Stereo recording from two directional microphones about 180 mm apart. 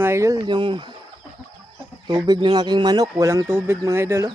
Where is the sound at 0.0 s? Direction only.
15° right (ahead or behind).